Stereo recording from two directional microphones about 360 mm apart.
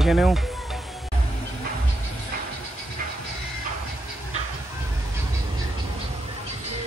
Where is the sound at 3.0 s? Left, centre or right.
Right.